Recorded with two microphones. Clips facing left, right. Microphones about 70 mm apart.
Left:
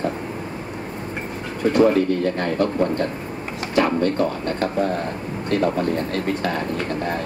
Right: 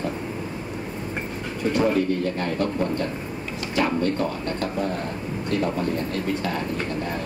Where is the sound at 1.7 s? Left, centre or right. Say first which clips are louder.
Left 5 dB; left.